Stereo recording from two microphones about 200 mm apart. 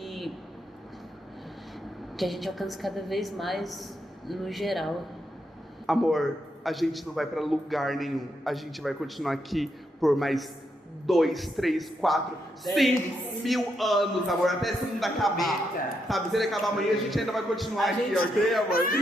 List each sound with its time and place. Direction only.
0.0 s vehicle: centre (ahead or behind)
2.1 s a man's voice: centre (ahead or behind)
18.7 s speech: 45° left (ahead or behind)